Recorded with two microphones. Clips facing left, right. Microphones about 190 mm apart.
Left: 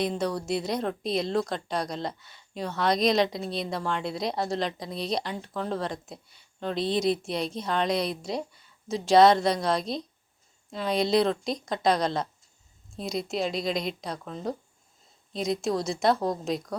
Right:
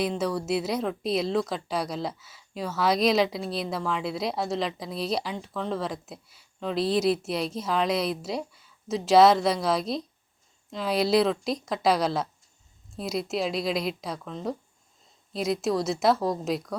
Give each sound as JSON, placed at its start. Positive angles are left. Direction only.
{"t": 0.0, "sound": "a woman's voice", "side_deg": -5}